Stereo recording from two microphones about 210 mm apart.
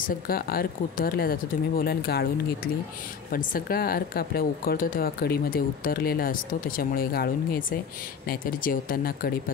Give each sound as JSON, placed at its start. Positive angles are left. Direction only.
{"t": 0.0, "sound": "speech", "side_deg": 45}